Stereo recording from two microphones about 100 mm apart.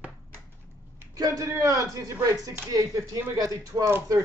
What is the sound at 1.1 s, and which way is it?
Speech, 35° right (ahead or behind).